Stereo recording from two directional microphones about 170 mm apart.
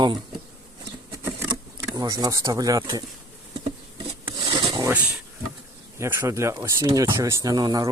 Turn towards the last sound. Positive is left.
turn(degrees=-25)  # may be behind; listen again after turning